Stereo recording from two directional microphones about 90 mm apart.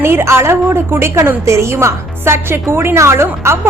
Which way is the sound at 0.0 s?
30° right (ahead or behind).